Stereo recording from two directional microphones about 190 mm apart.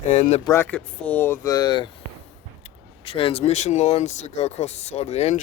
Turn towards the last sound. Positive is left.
turn(degrees=35)  # may be behind; listen again after turning